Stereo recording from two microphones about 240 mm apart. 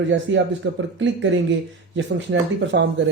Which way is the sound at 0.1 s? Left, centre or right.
Right.